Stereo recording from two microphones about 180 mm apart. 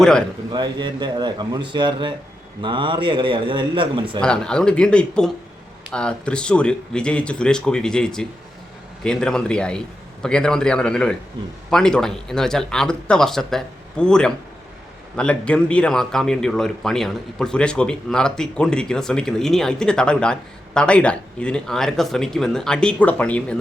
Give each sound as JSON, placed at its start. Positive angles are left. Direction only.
{"t": 0.0, "sound": "speech", "side_deg": 5}
{"t": 0.5, "sound": "speech", "side_deg": -25}
{"t": 4.2, "sound": "speech", "side_deg": 5}